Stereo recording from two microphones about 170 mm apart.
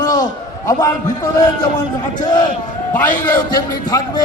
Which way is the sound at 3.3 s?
20° left (ahead or behind).